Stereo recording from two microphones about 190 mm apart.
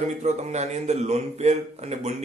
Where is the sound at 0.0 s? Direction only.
35° right (ahead or behind).